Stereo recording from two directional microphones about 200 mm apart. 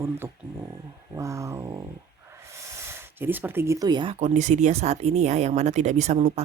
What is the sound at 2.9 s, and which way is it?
Speech, 10° right (ahead or behind).